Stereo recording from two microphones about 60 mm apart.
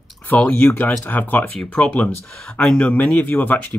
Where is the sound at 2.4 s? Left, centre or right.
Centre; by 3.8 s left.